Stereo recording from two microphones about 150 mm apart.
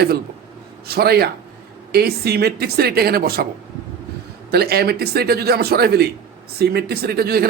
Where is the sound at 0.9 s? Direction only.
90° right.